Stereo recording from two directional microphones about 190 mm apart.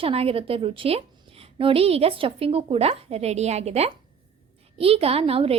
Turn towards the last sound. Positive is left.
turn(degrees=-30)  # may be behind; listen again after turning